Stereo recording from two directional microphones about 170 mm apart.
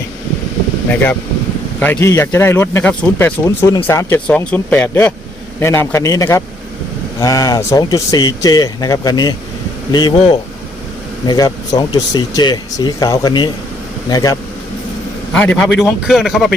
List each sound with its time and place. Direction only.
1.8 s speech: 15° left (ahead or behind)
15.3 s speech: 5° left (ahead or behind)